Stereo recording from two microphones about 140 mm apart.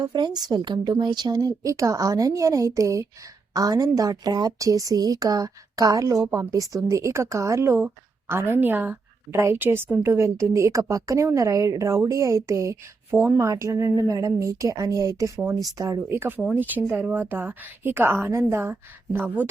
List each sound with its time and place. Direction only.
0.0 s a woman's voice: 30° right (ahead or behind); by 19.5 s 15° right (ahead or behind)